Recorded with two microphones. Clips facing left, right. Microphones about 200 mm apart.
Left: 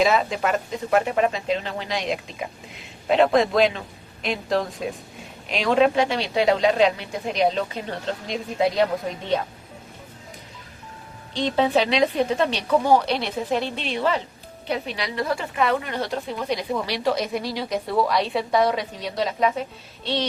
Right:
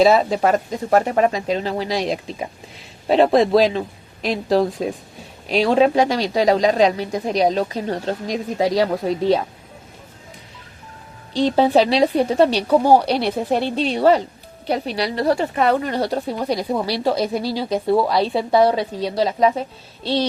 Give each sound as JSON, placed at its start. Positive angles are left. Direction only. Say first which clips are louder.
{"t": 0.0, "sound": "a woman's voice", "louder": "right 6 dB", "side_deg": -35}
{"t": 11.3, "sound": "a woman's voice", "louder": "right 5 dB", "side_deg": -35}